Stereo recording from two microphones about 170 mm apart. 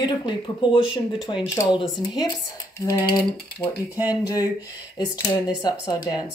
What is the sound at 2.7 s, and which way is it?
Speech, 20° left (ahead or behind).